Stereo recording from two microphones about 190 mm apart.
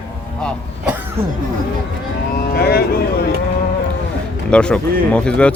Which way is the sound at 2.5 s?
55° left (ahead or behind).